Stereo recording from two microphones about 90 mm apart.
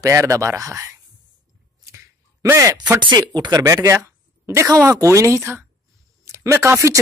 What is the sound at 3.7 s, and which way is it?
Speech, 35° right (ahead or behind).